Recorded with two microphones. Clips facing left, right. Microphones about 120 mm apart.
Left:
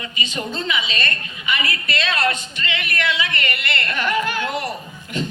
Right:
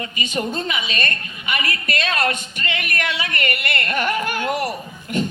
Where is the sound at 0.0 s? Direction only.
45° right (ahead or behind).